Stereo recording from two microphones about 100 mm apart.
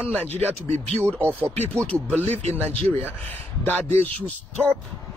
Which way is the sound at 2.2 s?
90° right.